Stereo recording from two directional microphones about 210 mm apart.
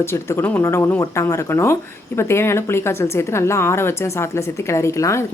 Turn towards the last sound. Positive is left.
turn(degrees=15)  # may be behind; listen again after turning